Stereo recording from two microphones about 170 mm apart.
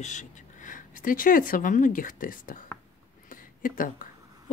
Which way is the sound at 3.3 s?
50° left (ahead or behind).